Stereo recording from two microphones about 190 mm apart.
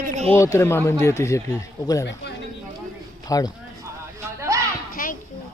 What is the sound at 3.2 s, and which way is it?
Speech, 20° left (ahead or behind).